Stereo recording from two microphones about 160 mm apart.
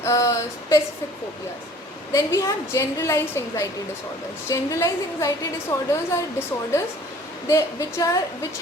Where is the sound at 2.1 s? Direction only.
20° left (ahead or behind).